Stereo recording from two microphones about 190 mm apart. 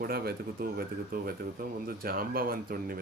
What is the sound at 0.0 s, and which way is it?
Speech, 50° right (ahead or behind).